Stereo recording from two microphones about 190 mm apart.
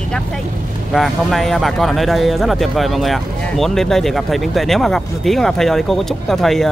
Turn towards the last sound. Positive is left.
turn(degrees=0)  # may be behind; listen again after turning